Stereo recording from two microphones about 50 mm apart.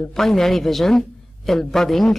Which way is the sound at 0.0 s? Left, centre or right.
Centre.